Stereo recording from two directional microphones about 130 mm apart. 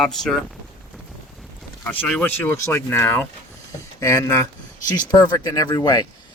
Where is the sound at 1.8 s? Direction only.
10° left (ahead or behind); by 6.0 s 30° left (ahead or behind).